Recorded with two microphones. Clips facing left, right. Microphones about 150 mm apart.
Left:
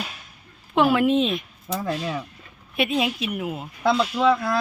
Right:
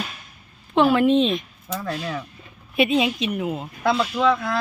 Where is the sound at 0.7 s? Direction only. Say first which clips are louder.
Right 2 dB; 10° left (ahead or behind).